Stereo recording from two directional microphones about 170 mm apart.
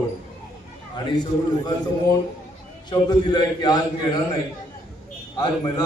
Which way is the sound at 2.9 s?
25° left (ahead or behind).